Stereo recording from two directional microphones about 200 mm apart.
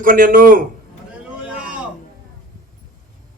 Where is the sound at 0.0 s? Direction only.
45° right (ahead or behind).